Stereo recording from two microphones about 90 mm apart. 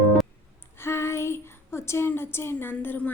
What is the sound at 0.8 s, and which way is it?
A woman's voice, 30° left (ahead or behind).